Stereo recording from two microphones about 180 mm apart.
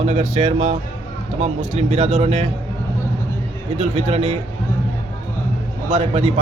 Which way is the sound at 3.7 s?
35° right (ahead or behind).